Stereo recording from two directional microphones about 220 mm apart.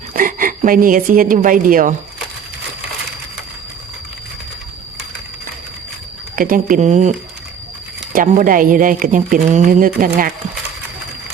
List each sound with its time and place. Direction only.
0.1 s a woman's voice: 40° right (ahead or behind)
6.3 s speech: 40° right (ahead or behind)
8.1 s speech: 35° right (ahead or behind)